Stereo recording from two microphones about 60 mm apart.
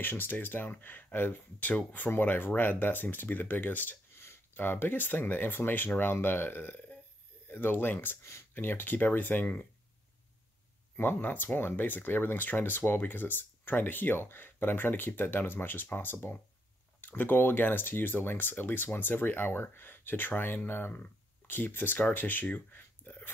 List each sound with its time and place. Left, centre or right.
0.0 s speech: left
4.1 s a sound: left
4.6 s speech: left
11.0 s speech: left